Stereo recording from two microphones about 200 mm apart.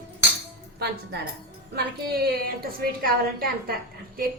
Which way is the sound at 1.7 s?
50° right (ahead or behind).